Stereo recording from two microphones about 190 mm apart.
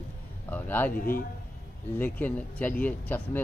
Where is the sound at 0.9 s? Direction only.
50° left (ahead or behind).